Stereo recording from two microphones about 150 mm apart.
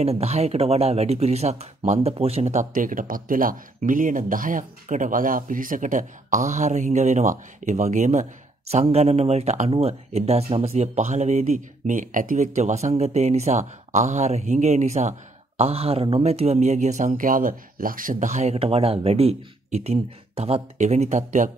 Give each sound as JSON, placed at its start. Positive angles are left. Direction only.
{"t": 0.0, "sound": "speech", "side_deg": -45}